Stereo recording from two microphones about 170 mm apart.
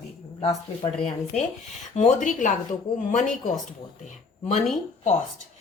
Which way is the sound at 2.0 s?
45° left (ahead or behind).